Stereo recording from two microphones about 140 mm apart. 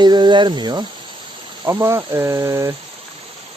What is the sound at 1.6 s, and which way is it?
Speech, 20° right (ahead or behind).